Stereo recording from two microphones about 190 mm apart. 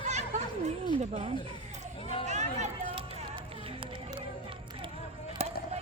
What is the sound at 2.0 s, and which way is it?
Chatter, 30° left (ahead or behind).